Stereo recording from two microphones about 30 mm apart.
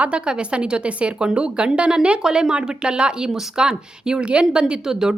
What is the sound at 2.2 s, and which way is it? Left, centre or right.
Speech, right.